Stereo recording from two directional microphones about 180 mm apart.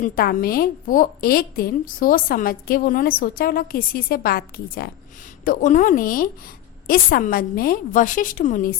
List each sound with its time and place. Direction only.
0.0 s a woman's voice: 50° left (ahead or behind)
5.5 s a woman's voice: 45° left (ahead or behind)